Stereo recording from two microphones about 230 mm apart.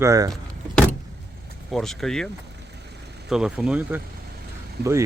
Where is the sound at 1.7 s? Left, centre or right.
Centre.